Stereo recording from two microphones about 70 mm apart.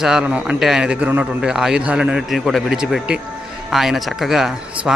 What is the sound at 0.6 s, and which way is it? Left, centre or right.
A man's voice, centre.